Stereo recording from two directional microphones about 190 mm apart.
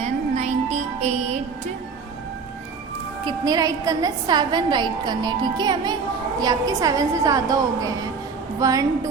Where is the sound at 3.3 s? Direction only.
20° right (ahead or behind).